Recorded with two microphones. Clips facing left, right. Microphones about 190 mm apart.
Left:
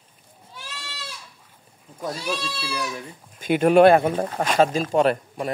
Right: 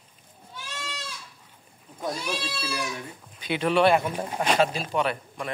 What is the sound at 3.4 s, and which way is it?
Speech, 45° left (ahead or behind).